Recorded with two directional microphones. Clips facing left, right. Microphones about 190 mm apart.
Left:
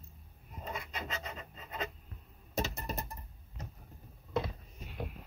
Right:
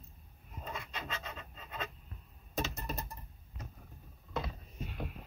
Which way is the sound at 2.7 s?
25° left (ahead or behind).